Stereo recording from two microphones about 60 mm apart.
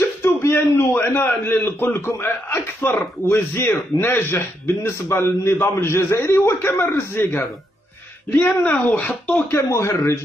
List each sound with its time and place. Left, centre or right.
0.0 s a sound: left
1.2 s a man's voice: left
9.5 s speech: left